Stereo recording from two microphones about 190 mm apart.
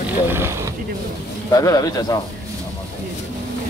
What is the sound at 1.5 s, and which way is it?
Speech, 20° left (ahead or behind).